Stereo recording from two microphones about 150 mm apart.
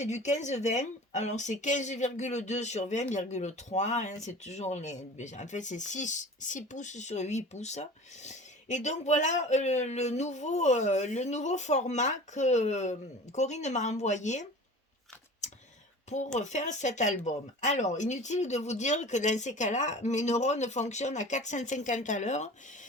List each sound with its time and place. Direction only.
0.0 s speech: 50° left (ahead or behind)
15.4 s a sound: 50° left (ahead or behind)
16.0 s speech: 50° left (ahead or behind)